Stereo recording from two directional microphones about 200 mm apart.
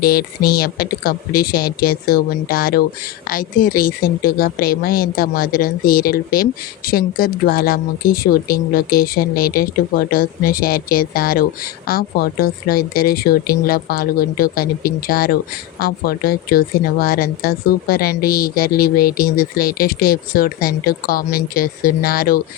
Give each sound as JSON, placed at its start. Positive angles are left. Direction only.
{"t": 0.0, "sound": "a woman's voice", "side_deg": 50}